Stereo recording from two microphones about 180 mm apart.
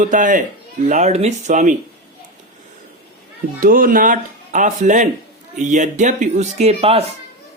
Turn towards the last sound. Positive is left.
turn(degrees=-35)  # may be behind; listen again after turning